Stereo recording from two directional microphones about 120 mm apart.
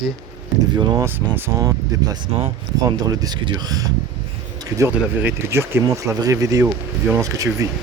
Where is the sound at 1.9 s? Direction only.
30° right (ahead or behind).